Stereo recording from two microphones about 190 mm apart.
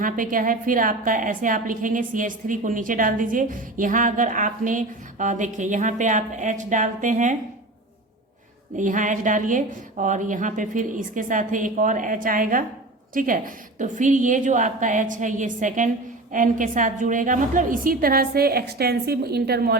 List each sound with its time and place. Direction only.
0.0 s a woman's voice: 45° right (ahead or behind)
8.8 s a woman's voice: 40° right (ahead or behind)